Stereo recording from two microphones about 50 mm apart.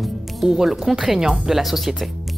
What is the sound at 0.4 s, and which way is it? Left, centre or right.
Speech, centre.